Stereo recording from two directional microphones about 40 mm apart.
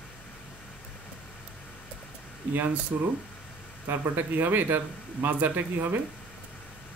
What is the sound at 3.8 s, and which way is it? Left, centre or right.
A man's voice, right.